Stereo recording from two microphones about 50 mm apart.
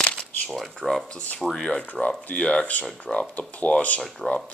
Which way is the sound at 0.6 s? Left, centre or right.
Centre.